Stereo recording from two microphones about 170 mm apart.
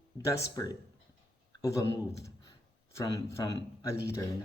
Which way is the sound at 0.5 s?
20° left (ahead or behind).